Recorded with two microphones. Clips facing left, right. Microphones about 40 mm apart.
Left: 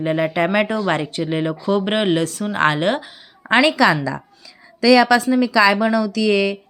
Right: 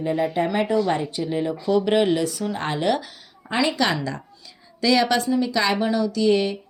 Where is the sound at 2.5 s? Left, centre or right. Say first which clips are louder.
Left 7 dB; left.